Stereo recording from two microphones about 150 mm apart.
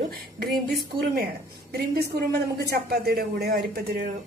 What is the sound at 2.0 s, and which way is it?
A woman's voice, 90° right.